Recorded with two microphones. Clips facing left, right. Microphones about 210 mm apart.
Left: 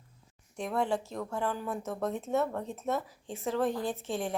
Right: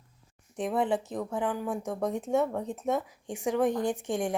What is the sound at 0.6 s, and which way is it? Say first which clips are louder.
Speech: right 3 dB; 20° right (ahead or behind).